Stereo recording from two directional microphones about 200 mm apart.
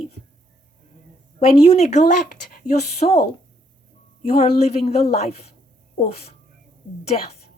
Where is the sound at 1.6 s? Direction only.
30° left (ahead or behind).